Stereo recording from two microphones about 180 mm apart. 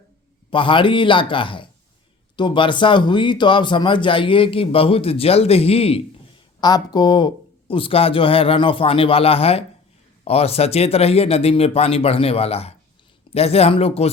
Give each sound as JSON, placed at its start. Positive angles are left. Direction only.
{"t": 0.5, "sound": "speech", "side_deg": 25}
{"t": 6.6, "sound": "speech", "side_deg": 20}